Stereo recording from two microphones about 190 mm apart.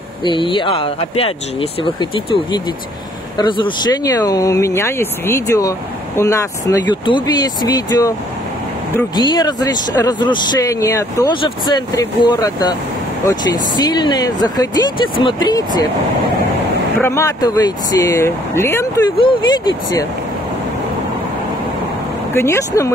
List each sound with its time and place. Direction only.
0.2 s speech: 25° left (ahead or behind)
9.1 s speech: 20° left (ahead or behind)
17.0 s speech: 15° left (ahead or behind)
19.1 s speech: 25° left (ahead or behind)
22.3 s speech: 15° left (ahead or behind)